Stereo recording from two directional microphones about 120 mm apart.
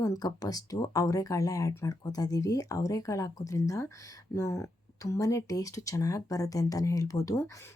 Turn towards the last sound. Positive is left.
turn(degrees=25)  # may be behind; listen again after turning